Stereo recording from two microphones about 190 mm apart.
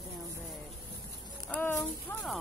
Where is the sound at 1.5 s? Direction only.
10° left (ahead or behind).